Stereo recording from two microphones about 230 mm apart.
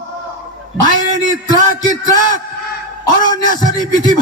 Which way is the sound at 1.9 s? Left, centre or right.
Centre.